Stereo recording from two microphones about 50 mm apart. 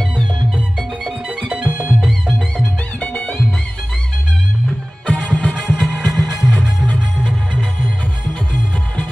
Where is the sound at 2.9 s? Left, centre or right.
Left.